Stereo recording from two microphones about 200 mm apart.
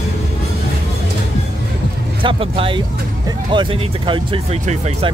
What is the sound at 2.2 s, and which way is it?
Speech, 25° right (ahead or behind).